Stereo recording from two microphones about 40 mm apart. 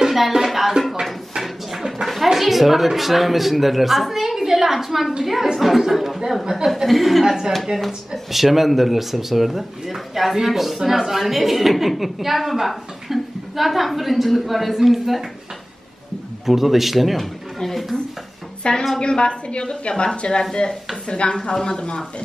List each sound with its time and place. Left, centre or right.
0.0 s music: centre
0.5 s a sound: centre
2.2 s speech: centre
16.4 s speech: centre
17.6 s a sound: centre
18.6 s a woman's voice: left